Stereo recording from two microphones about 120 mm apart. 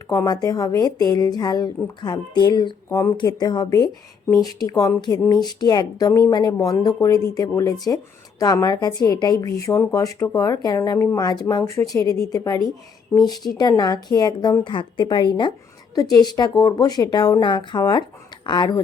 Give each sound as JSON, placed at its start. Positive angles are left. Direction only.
{"t": 0.1, "sound": "speech", "side_deg": 30}